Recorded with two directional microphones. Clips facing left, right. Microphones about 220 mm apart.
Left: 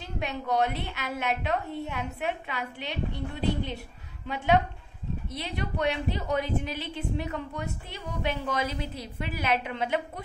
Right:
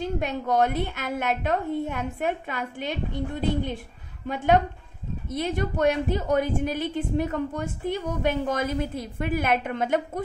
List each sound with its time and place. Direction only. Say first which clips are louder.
0.0 s a woman's voice: right 6 dB; 45° right (ahead or behind)